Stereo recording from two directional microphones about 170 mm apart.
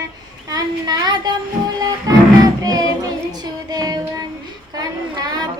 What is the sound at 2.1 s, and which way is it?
Music, 20° right (ahead or behind).